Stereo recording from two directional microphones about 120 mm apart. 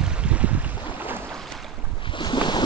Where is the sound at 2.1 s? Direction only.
40° left (ahead or behind).